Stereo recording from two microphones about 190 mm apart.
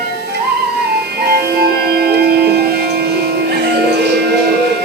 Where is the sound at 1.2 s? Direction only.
55° right (ahead or behind).